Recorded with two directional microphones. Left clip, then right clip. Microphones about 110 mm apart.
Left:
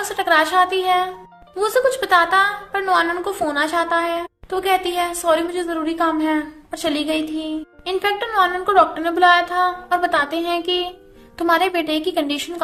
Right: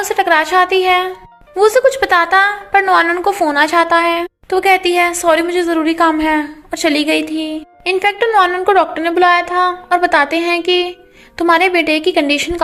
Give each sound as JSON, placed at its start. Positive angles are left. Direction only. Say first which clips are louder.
{"t": 0.1, "sound": "a woman's voice", "louder": "right 4 dB", "side_deg": -70}
{"t": 7.9, "sound": "a woman's voice", "louder": "right 6 dB", "side_deg": -55}